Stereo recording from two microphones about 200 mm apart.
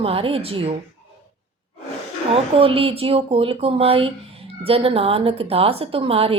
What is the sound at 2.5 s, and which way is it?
Speech, 30° right (ahead or behind).